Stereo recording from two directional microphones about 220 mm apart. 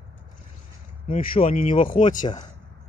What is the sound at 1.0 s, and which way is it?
Speech, 25° left (ahead or behind).